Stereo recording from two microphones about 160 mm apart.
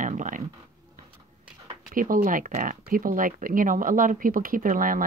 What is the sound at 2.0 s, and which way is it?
Speech, 60° right (ahead or behind).